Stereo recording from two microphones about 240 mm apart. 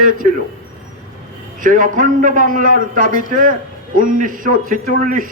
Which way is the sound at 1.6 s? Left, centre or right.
Right.